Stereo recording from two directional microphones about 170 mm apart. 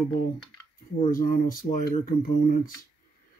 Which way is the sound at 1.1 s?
55° left (ahead or behind).